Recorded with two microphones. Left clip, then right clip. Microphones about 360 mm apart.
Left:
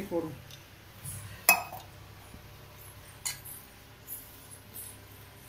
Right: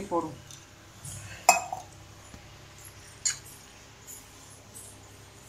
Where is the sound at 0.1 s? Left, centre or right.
Right.